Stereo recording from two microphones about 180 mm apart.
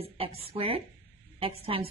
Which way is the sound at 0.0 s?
30° right (ahead or behind).